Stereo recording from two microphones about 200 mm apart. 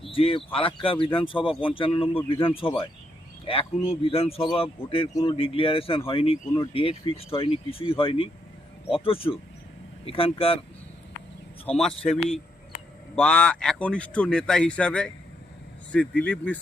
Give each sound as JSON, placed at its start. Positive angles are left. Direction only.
{"t": 0.0, "sound": "speech", "side_deg": 25}
{"t": 11.8, "sound": "speech", "side_deg": 0}